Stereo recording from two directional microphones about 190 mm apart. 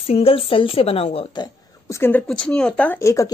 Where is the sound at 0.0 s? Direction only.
30° left (ahead or behind).